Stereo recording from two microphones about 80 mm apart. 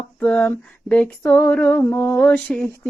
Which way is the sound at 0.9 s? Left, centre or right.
Centre.